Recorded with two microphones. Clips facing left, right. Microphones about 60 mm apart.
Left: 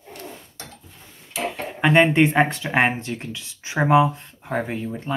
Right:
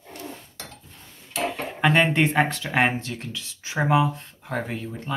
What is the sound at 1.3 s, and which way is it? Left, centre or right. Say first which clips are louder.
Speech: even; centre.